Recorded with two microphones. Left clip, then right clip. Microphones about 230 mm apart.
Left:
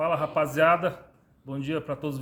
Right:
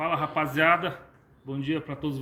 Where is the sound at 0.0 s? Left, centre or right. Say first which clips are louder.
Left 2 dB; left.